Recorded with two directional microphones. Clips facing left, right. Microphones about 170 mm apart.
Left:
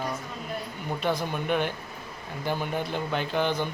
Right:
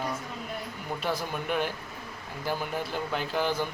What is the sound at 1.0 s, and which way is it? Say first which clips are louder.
Speech: left 4 dB; 5° right (ahead or behind).